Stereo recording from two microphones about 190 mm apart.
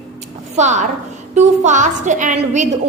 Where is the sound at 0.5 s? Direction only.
40° right (ahead or behind).